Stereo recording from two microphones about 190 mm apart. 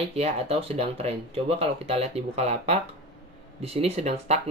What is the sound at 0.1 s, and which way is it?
Speech, 35° right (ahead or behind).